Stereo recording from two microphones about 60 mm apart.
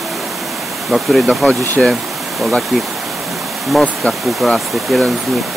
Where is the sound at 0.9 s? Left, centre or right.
Centre.